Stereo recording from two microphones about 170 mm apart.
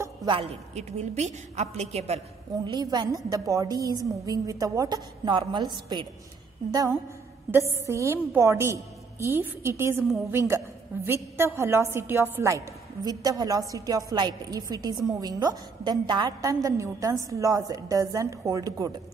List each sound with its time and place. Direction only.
0.0 s a sound: 20° right (ahead or behind)
0.4 s a woman's voice: 40° right (ahead or behind)
2.6 s a woman's voice: 25° right (ahead or behind)